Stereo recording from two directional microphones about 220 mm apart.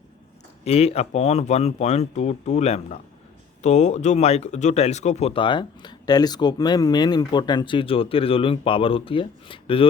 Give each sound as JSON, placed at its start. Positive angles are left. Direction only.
{"t": 0.6, "sound": "speech", "side_deg": 30}